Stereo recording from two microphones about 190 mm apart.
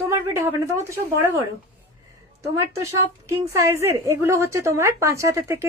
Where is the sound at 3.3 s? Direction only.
15° right (ahead or behind).